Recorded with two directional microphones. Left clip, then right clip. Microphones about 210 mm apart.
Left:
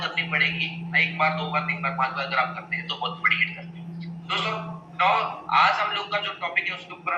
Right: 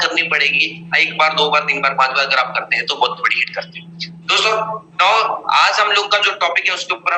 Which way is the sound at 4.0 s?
45° right (ahead or behind).